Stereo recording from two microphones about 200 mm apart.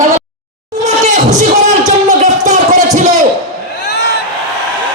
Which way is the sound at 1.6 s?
35° right (ahead or behind).